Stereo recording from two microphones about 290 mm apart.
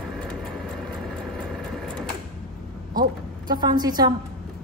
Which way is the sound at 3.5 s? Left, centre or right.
Centre.